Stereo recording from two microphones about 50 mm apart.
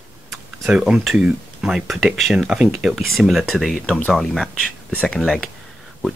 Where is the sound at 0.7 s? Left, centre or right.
Centre.